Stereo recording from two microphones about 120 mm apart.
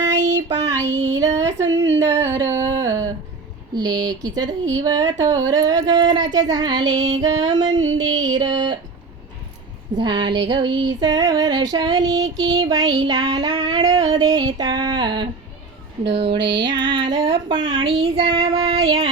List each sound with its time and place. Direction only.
0.0 s child singing: 25° right (ahead or behind)
0.8 s child singing: 75° right (ahead or behind)
1.4 s a sound: 25° right (ahead or behind)
3.8 s female singing: 35° right (ahead or behind)
10.0 s female singing: 40° right (ahead or behind)